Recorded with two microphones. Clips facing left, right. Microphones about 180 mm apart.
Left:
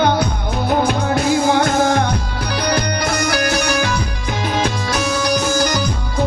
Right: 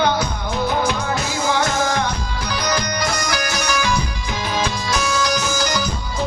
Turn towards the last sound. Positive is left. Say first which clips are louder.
# left 4 dB
turn(degrees=55)  # may be behind; listen again after turning